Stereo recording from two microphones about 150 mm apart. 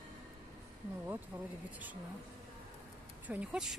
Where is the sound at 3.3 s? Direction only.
5° right (ahead or behind).